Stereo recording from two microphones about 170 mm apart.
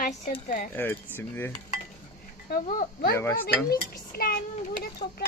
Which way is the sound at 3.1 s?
15° left (ahead or behind).